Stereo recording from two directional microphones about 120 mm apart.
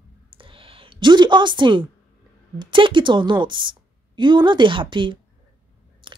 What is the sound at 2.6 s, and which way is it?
A woman's voice, 45° right (ahead or behind).